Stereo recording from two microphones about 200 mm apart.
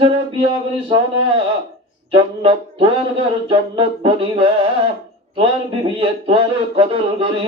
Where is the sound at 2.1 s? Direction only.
30° right (ahead or behind).